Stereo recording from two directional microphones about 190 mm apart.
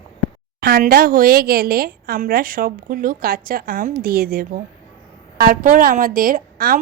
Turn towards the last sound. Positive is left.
turn(degrees=-50)  # may be behind; listen again after turning